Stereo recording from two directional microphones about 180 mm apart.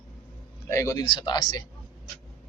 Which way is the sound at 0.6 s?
15° left (ahead or behind).